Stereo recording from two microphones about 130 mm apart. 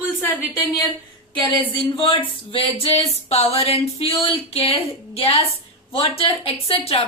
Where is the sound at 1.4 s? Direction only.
40° left (ahead or behind).